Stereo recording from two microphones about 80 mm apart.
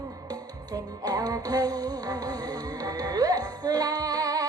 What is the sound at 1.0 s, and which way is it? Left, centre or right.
Music, right.